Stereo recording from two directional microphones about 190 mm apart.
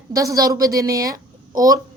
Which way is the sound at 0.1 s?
15° right (ahead or behind).